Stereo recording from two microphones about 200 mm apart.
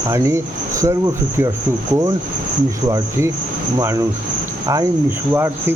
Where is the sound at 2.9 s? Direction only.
15° right (ahead or behind).